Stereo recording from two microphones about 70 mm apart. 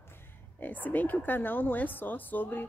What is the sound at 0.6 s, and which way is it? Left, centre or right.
Speech, left.